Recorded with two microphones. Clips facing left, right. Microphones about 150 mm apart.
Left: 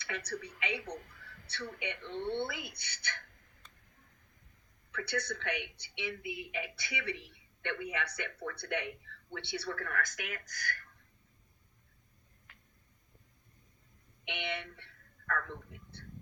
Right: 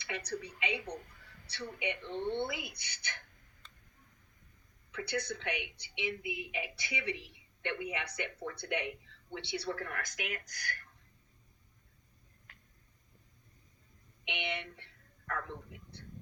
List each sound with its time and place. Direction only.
0.1 s a woman's voice: 15° right (ahead or behind)
4.9 s a woman's voice: 15° right (ahead or behind)
14.3 s a woman's voice: 15° right (ahead or behind)
15.3 s a sound: 20° right (ahead or behind)